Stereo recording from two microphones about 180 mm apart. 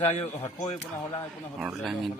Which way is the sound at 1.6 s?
Centre (ahead or behind).